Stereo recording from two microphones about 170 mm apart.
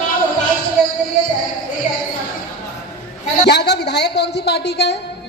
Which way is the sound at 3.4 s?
80° left.